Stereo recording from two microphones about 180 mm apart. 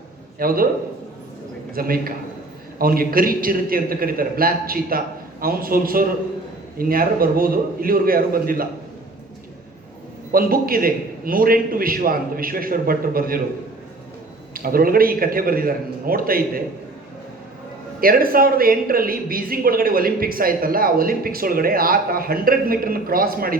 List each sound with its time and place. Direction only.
0.3 s speech: 55° right (ahead or behind)
1.7 s a man's voice: 55° right (ahead or behind)
10.3 s speech: 55° right (ahead or behind)
14.5 s speech: 55° right (ahead or behind)
18.0 s speech: 55° right (ahead or behind)